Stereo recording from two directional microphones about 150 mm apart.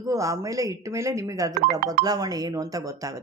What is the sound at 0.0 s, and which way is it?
A woman's voice, 20° right (ahead or behind).